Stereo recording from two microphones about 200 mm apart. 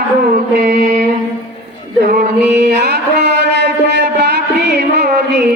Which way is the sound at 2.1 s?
55° right (ahead or behind).